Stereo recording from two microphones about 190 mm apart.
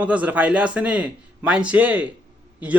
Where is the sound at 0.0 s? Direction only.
10° right (ahead or behind).